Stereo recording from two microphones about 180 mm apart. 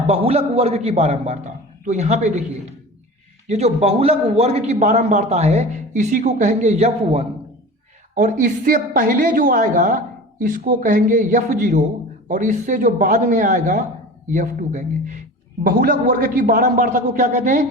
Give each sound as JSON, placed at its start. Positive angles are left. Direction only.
{"t": 0.1, "sound": "a man's voice", "side_deg": -35}
{"t": 8.1, "sound": "a woman's voice", "side_deg": -45}